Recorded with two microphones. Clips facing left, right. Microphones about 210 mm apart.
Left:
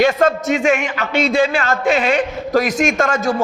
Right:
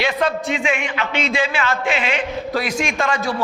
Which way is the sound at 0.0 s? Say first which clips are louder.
Left 6 dB; 45° left (ahead or behind).